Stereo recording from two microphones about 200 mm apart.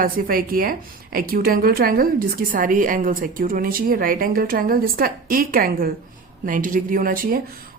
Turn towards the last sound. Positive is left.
turn(degrees=-45)  # may be behind; listen again after turning